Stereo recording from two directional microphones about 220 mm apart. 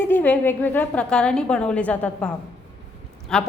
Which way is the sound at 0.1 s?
10° left (ahead or behind).